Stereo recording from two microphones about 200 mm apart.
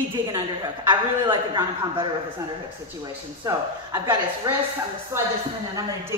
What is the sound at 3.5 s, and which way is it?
Speech, 20° right (ahead or behind).